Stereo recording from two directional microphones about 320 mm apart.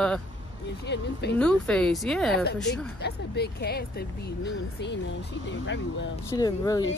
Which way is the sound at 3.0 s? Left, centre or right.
Left.